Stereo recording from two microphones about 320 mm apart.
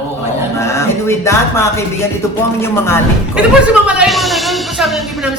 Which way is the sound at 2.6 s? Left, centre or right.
Centre.